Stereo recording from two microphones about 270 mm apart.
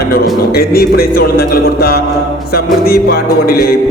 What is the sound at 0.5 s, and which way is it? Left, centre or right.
Music, left.